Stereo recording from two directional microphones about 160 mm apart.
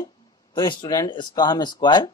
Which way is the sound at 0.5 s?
30° left (ahead or behind).